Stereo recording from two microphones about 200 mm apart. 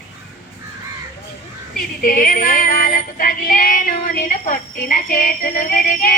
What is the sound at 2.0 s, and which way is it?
A woman's voice, 45° left (ahead or behind).